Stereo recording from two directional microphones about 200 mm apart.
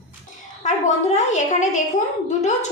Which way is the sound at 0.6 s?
35° left (ahead or behind).